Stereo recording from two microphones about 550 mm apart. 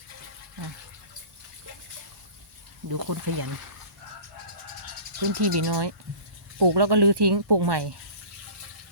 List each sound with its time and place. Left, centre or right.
2.9 s speech: right
5.4 s speech: right